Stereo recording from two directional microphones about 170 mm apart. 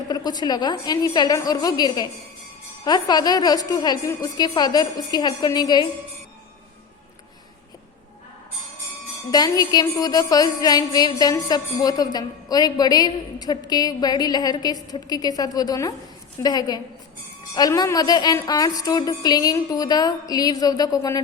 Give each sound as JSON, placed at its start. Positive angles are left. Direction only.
{"t": 0.1, "sound": "a woman's voice", "side_deg": 25}
{"t": 9.3, "sound": "a woman's voice", "side_deg": 25}